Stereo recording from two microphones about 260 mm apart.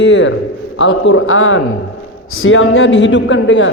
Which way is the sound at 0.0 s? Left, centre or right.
Left.